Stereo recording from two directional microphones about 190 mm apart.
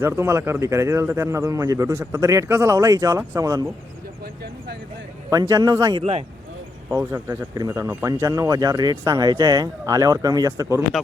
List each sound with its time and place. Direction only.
0.0 s speech: 15° right (ahead or behind)
5.3 s speech: 20° right (ahead or behind)
6.0 s speech: 30° right (ahead or behind)
6.9 s speech: 15° right (ahead or behind)